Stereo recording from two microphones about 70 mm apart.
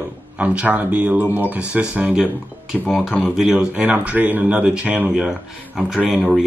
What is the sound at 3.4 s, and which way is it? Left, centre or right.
Speech, centre.